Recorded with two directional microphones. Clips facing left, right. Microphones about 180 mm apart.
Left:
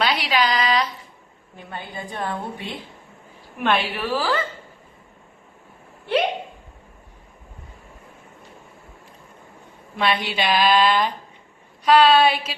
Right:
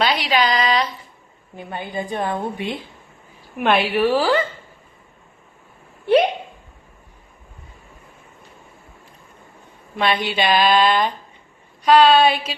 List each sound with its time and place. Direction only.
0.0 s a woman's voice: centre (ahead or behind)
1.5 s a woman's voice: 15° right (ahead or behind)
10.0 s a woman's voice: centre (ahead or behind)